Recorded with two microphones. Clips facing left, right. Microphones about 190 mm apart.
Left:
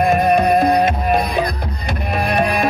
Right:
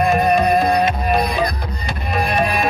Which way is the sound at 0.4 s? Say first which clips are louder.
Left 2 dB; 55° left (ahead or behind).